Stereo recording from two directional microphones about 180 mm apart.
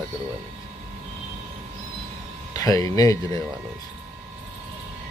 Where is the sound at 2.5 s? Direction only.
20° left (ahead or behind).